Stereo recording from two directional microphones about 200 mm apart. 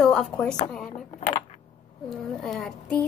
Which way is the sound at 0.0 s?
5° left (ahead or behind).